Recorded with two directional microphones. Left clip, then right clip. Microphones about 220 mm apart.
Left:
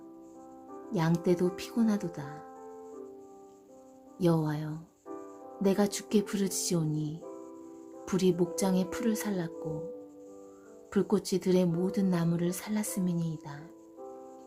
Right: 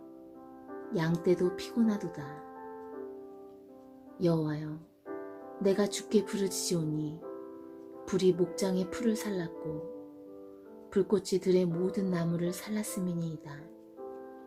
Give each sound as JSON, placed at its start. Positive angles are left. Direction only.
{"t": 0.9, "sound": "a woman's voice", "side_deg": 20}
{"t": 4.2, "sound": "a woman's voice", "side_deg": 25}
{"t": 10.9, "sound": "a woman's voice", "side_deg": 20}